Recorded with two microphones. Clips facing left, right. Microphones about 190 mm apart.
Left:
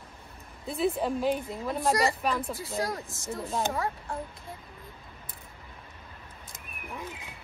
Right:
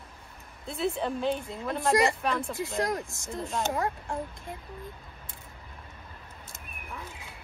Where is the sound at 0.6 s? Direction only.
Centre (ahead or behind).